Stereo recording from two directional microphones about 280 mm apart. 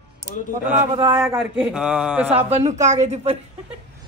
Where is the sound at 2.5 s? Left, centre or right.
Right.